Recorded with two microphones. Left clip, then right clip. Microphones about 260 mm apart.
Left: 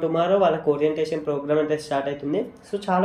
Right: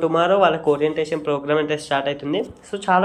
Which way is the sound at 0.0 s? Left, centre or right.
Centre.